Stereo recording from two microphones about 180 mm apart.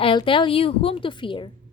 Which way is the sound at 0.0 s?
30° left (ahead or behind).